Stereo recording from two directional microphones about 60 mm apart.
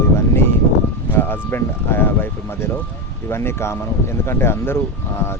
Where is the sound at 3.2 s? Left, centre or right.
Left.